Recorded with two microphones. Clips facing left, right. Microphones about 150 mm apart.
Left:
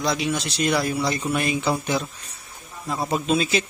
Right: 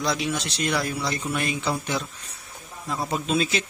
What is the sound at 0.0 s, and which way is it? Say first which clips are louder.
A man's voice: left 2 dB; centre (ahead or behind).